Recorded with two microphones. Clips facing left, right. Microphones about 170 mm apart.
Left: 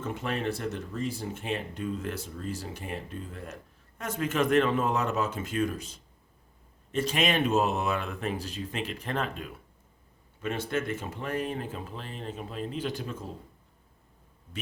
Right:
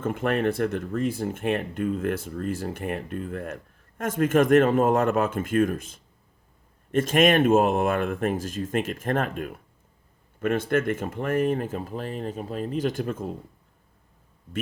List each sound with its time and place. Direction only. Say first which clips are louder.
0.0 s speech: right 7 dB; 55° right (ahead or behind)